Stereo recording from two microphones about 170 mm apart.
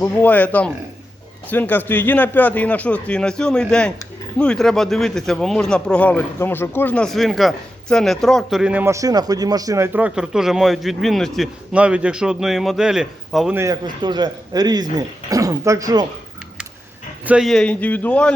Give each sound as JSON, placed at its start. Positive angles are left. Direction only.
{"t": 0.0, "sound": "speech", "side_deg": 10}
{"t": 13.6, "sound": "speech", "side_deg": -20}
{"t": 17.2, "sound": "speech", "side_deg": -5}